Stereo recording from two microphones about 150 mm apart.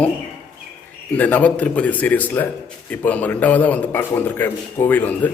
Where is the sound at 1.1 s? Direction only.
10° left (ahead or behind).